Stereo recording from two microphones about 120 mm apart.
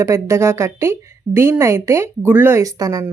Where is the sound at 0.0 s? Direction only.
25° right (ahead or behind).